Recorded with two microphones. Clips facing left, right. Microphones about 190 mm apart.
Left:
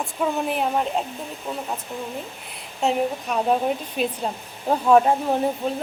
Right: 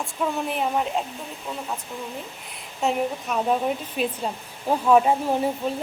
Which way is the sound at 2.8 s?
Centre (ahead or behind).